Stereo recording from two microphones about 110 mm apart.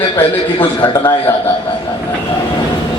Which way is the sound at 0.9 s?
35° left (ahead or behind).